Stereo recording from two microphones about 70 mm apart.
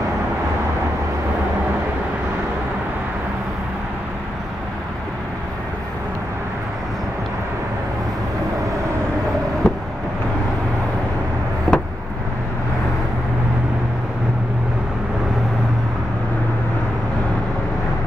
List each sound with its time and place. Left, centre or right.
9.6 s vehicle: centre
11.7 s vehicle: centre